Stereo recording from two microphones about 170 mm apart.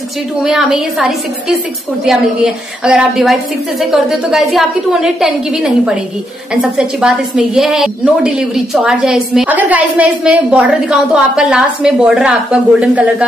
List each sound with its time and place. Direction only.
0.4 s a woman's voice: centre (ahead or behind)